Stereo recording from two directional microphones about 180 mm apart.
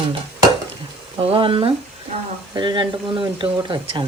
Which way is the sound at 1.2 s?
30° right (ahead or behind).